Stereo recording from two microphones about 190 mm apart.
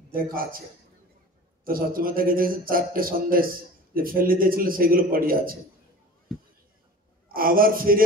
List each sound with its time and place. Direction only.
0.1 s a man's voice: 50° right (ahead or behind)
1.6 s a man's voice: 50° right (ahead or behind)
7.3 s a man's voice: 50° right (ahead or behind)